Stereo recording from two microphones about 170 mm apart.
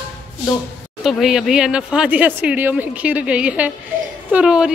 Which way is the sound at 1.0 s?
Centre (ahead or behind).